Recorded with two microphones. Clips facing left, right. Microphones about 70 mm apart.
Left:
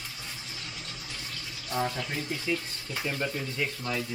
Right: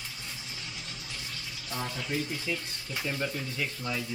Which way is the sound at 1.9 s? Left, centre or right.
Centre.